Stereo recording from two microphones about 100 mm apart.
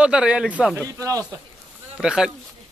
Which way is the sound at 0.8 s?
35° right (ahead or behind).